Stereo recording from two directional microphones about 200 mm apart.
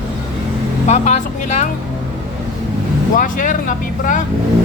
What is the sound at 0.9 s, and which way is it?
Speech, 35° left (ahead or behind).